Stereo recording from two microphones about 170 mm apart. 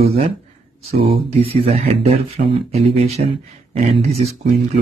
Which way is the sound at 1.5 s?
35° right (ahead or behind).